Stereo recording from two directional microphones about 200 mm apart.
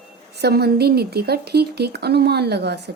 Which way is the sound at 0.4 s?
50° right (ahead or behind).